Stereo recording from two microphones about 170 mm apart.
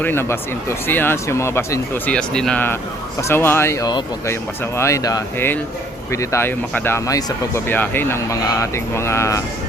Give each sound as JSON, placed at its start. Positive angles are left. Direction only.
{"t": 0.0, "sound": "speech", "side_deg": 15}